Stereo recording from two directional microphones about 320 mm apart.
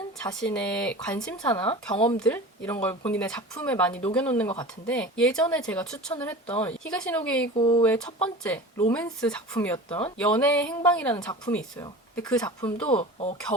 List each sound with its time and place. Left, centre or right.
0.3 s speech: centre
2.1 s speech: centre
12.9 s speech: centre